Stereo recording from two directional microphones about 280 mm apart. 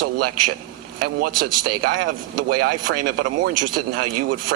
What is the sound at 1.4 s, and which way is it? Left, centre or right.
Speech, right.